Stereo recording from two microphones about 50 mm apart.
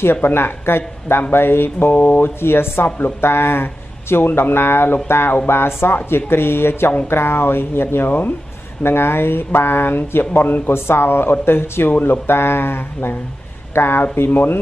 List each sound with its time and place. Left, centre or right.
0.0 s speech: left
1.9 s speech: left
2.4 s speech: left